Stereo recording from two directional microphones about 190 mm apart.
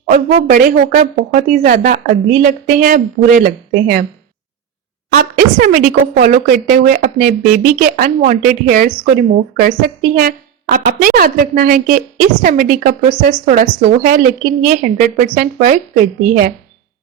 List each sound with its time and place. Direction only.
0.1 s a woman's voice: 40° right (ahead or behind)
5.1 s a woman's voice: 50° right (ahead or behind)